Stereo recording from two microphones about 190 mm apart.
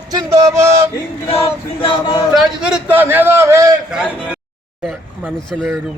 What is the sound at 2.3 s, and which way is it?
A man's voice, 5° right (ahead or behind).